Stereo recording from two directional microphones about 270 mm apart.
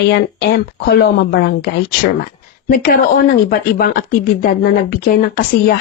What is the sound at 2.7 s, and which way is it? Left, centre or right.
Speech, left.